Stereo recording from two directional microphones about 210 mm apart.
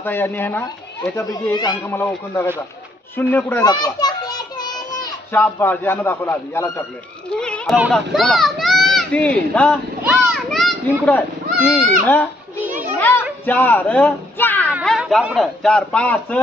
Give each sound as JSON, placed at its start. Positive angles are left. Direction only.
{"t": 0.0, "sound": "a child's voice", "side_deg": 10}
{"t": 3.7, "sound": "children playing", "side_deg": 20}
{"t": 5.4, "sound": "a child's voice", "side_deg": 10}
{"t": 10.0, "sound": "children playing", "side_deg": -5}
{"t": 13.0, "sound": "a sound", "side_deg": 10}
{"t": 14.7, "sound": "speech", "side_deg": -5}